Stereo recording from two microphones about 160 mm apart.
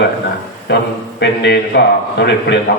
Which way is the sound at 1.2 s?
90° left.